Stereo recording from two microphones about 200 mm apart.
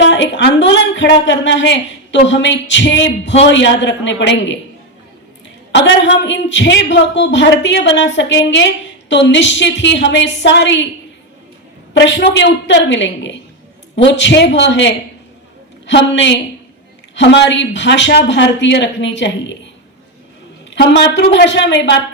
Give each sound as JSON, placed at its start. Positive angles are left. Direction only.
{"t": 0.0, "sound": "a sound", "side_deg": 65}
{"t": 0.9, "sound": "a woman's voice", "side_deg": 65}
{"t": 5.7, "sound": "a woman's voice", "side_deg": 65}
{"t": 11.9, "sound": "a woman's voice", "side_deg": 60}
{"t": 20.7, "sound": "a woman's voice", "side_deg": 65}